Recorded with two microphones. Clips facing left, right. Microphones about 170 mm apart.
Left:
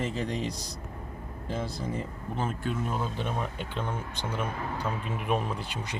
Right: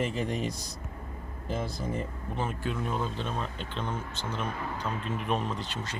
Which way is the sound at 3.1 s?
15° left (ahead or behind).